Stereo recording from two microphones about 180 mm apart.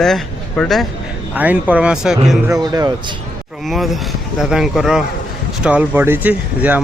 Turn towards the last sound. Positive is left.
turn(degrees=-10)  # may be behind; listen again after turning